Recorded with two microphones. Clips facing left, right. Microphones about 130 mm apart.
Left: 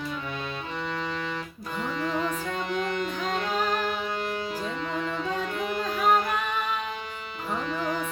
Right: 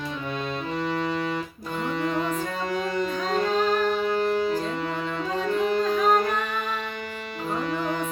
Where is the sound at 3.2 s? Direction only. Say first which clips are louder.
Right 5 dB; 40° right (ahead or behind).